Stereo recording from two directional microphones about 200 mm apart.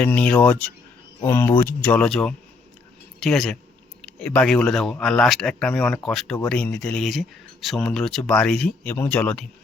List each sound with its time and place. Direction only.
0.0 s speech: 5° left (ahead or behind)